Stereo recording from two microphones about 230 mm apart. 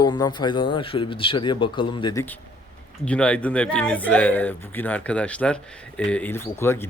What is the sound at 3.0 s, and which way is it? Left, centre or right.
Speech, centre.